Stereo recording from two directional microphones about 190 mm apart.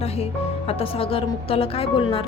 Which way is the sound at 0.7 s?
30° left (ahead or behind).